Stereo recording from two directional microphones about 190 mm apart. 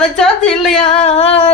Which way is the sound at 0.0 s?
Centre (ahead or behind).